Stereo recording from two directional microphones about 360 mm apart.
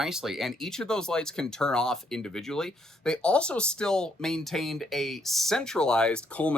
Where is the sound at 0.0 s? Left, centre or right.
Centre.